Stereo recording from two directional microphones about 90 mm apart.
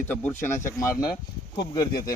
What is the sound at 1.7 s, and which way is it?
Speech, 45° left (ahead or behind).